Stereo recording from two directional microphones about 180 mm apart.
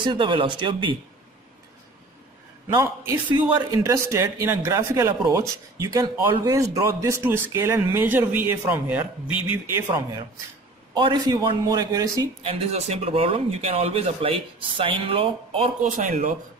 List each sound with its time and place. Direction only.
0.0 s a man's voice: 25° right (ahead or behind)
2.7 s a man's voice: 20° right (ahead or behind)
11.0 s a man's voice: 25° right (ahead or behind)
12.4 s speech: 35° right (ahead or behind)